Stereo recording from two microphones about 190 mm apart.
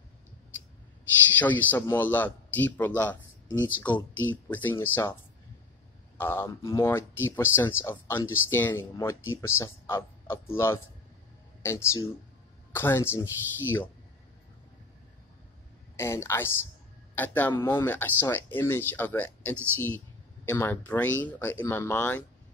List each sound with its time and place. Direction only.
1.4 s speech: 10° left (ahead or behind)
6.1 s speech: 10° left (ahead or behind)
16.0 s speech: 15° left (ahead or behind)